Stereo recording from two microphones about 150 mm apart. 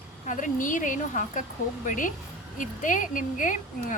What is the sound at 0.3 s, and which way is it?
Speech, 60° left (ahead or behind).